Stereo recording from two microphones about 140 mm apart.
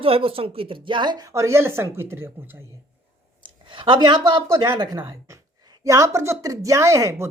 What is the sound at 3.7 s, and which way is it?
A woman's voice, 35° right (ahead or behind).